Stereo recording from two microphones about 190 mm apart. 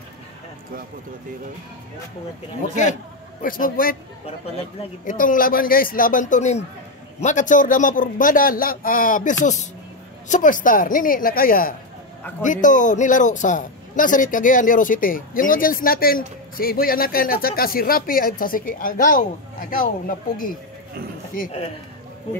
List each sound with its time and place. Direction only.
2.7 s a man's voice: 40° left (ahead or behind)
5.0 s a man's voice: 45° left (ahead or behind)
21.4 s a man's voice: 35° left (ahead or behind)